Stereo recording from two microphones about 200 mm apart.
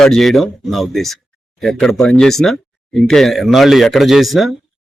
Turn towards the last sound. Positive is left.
turn(degrees=0)  # may be behind; listen again after turning